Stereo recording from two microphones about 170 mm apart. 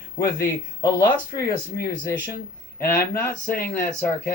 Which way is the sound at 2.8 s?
15° left (ahead or behind).